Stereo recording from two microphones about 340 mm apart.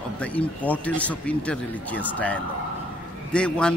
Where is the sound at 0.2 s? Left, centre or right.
Centre.